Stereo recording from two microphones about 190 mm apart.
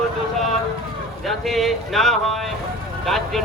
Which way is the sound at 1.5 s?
Centre (ahead or behind).